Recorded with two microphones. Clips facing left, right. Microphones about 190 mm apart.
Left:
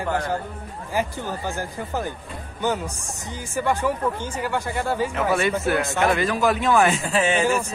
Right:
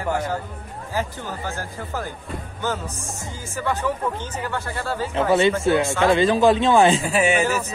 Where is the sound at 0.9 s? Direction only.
15° left (ahead or behind).